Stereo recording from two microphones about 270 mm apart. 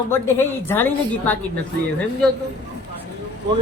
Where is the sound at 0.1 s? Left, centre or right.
Centre.